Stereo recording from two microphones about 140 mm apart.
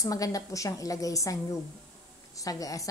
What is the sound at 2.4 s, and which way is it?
Speech, 25° left (ahead or behind).